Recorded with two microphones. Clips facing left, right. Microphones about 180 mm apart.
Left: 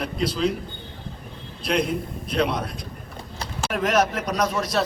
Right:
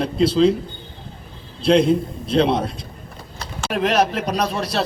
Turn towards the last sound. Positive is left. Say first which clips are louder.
# right 1 dB
turn(degrees=-30)  # may be behind; listen again after turning